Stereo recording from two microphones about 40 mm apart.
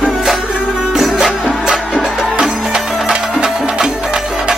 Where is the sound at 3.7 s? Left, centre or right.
Right.